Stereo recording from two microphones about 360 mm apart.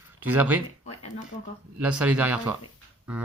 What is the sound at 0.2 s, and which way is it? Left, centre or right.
Speech, centre.